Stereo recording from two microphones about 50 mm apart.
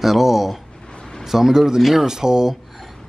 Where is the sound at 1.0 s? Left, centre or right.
Centre.